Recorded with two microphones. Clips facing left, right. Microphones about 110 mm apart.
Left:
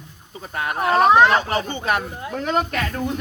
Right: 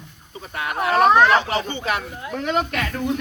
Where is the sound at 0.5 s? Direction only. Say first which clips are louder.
Left 1 dB; 35° left (ahead or behind).